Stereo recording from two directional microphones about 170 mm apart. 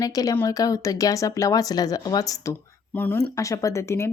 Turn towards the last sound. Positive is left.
turn(degrees=15)  # may be behind; listen again after turning